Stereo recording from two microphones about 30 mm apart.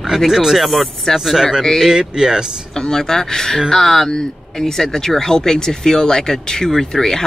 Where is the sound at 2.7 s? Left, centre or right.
Centre.